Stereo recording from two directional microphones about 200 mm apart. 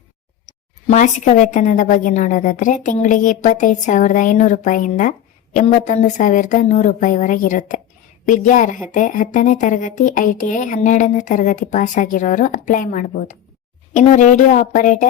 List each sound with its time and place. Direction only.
0.4 s a woman's voice: 40° left (ahead or behind)